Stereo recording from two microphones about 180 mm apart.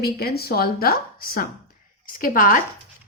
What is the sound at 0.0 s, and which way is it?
A woman's voice, 60° left (ahead or behind).